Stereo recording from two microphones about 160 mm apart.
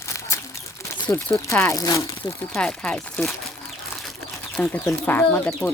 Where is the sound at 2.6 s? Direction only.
5° left (ahead or behind).